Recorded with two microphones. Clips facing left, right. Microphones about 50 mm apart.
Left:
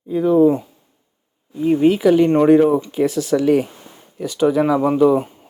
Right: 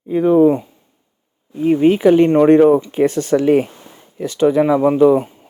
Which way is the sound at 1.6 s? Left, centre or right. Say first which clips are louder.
Right 2 dB; right.